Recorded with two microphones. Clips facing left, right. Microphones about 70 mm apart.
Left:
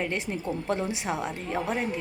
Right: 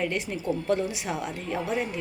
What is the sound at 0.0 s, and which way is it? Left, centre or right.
A woman's voice, left.